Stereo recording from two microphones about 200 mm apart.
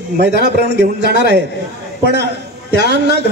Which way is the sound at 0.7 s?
60° right (ahead or behind).